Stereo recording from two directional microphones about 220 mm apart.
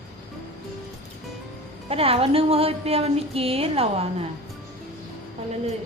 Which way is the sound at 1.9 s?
25° right (ahead or behind).